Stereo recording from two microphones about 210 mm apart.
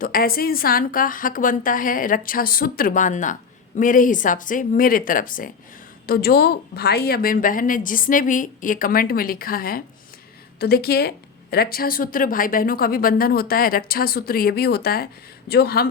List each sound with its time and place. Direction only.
0.0 s a woman's voice: 45° left (ahead or behind)